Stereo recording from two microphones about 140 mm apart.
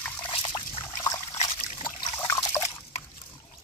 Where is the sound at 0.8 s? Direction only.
20° left (ahead or behind).